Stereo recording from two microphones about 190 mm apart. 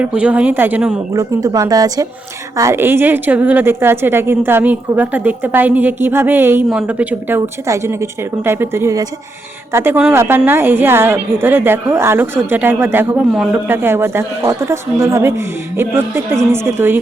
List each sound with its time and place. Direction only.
0.0 s a woman's voice: 5° right (ahead or behind)
1.1 s a woman's voice: 20° right (ahead or behind)